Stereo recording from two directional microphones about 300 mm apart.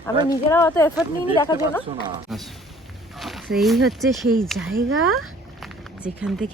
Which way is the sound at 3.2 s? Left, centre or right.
Centre.